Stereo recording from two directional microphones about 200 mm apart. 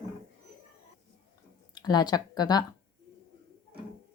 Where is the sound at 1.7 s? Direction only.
20° left (ahead or behind).